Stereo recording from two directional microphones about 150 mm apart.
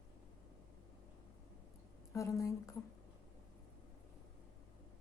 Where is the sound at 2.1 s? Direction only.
20° left (ahead or behind).